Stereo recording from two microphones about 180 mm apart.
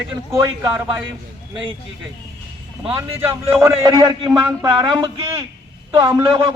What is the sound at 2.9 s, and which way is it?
Speech, 15° right (ahead or behind).